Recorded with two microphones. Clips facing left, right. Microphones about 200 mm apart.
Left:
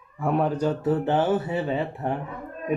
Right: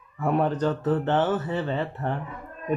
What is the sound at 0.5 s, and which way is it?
Mantra, 10° left (ahead or behind).